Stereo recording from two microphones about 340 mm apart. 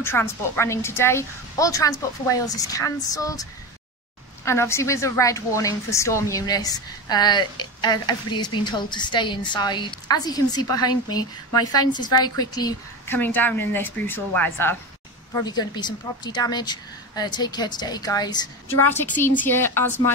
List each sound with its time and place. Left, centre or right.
0.0 s a woman's voice: centre
4.5 s a woman's voice: centre